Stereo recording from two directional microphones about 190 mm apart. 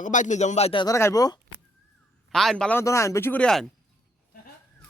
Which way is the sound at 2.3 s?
5° left (ahead or behind).